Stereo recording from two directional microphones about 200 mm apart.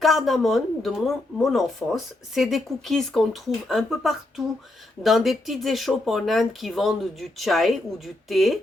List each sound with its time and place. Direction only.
0.0 s speech: centre (ahead or behind)